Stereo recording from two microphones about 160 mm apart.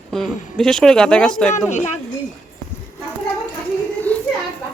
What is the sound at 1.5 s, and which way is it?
Speech, 45° left (ahead or behind).